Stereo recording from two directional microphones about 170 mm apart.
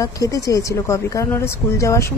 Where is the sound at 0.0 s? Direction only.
20° left (ahead or behind).